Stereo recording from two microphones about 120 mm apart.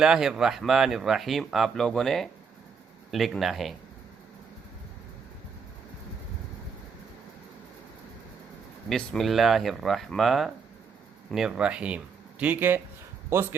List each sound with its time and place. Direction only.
0.0 s speech: 5° right (ahead or behind)
8.9 s speech: 5° left (ahead or behind); by 13.6 s 20° right (ahead or behind)